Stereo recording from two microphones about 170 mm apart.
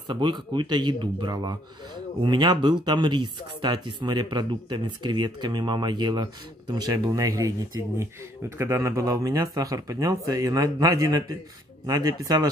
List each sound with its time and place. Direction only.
0.1 s speech: 25° right (ahead or behind)